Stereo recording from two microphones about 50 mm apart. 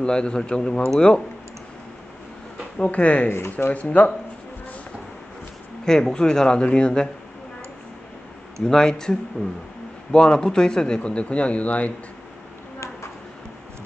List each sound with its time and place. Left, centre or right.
0.0 s speech: centre
2.8 s speech: left
3.3 s speech: left
3.7 s speech: left
5.9 s speech: centre
8.6 s speech: centre; by 11.9 s left